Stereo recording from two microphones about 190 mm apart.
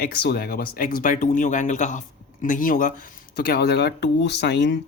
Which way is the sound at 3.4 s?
55° left (ahead or behind).